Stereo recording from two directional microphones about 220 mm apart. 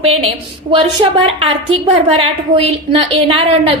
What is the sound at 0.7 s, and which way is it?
A woman's voice, 25° right (ahead or behind).